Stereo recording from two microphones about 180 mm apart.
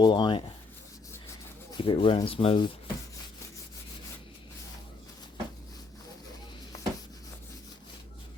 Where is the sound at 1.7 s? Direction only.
30° left (ahead or behind).